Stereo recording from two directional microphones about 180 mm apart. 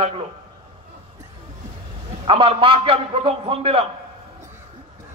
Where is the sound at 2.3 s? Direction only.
30° right (ahead or behind).